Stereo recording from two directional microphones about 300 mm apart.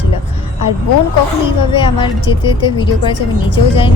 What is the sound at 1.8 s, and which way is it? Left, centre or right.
A woman's voice, centre.